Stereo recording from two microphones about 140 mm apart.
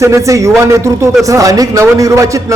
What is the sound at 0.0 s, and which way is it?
A man's voice, 20° right (ahead or behind).